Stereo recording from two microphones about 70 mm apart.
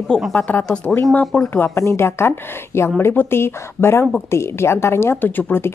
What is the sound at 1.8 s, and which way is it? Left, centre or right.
Speech, left.